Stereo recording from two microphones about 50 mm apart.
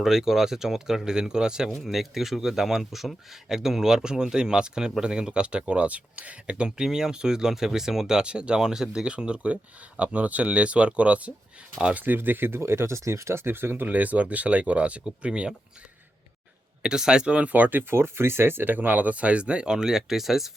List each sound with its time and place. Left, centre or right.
0.0 s speech: centre
9.0 s speech: right
11.9 s speech: right
13.9 s speech: right
16.8 s speech: centre